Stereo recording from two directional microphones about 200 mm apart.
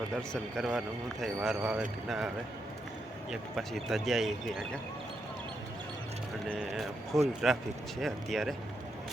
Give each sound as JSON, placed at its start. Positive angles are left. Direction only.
{"t": 0.2, "sound": "a man's voice", "side_deg": 0}
{"t": 3.5, "sound": "a man's voice", "side_deg": 0}
{"t": 6.5, "sound": "a man's voice", "side_deg": 0}